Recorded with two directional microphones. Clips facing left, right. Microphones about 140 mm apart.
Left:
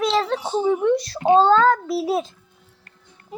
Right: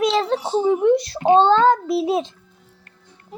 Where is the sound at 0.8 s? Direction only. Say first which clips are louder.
Right 3 dB; 30° right (ahead or behind).